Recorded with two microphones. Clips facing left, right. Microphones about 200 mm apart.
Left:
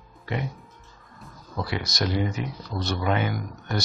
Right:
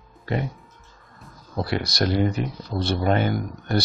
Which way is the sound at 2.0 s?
60° right (ahead or behind).